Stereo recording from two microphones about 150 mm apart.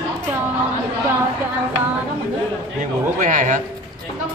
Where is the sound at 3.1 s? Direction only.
55° right (ahead or behind).